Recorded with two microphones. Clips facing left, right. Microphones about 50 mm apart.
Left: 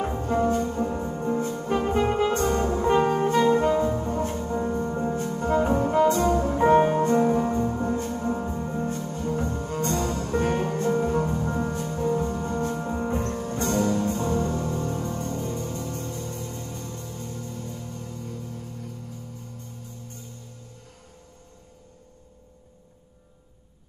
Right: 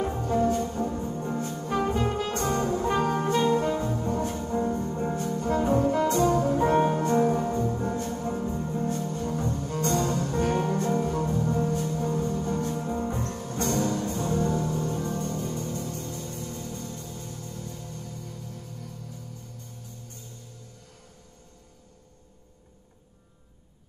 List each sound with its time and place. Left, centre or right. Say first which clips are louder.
0.2 s music: left 2 dB; left
1.9 s brass instrument: left 5 dB; left
4.4 s music: left 1 dB; left
5.8 s brass instrument: left 2 dB; left
6.4 s music: left 3 dB; left